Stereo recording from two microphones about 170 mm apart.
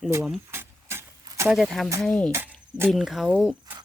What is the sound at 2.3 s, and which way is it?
Cricket, 15° right (ahead or behind).